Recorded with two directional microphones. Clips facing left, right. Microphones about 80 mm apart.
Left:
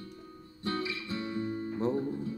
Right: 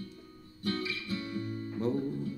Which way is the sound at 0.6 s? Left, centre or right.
Left.